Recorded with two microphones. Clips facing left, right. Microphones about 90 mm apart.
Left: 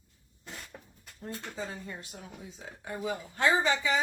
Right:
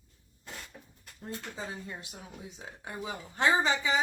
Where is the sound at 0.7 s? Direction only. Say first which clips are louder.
Left 2 dB; 90° left.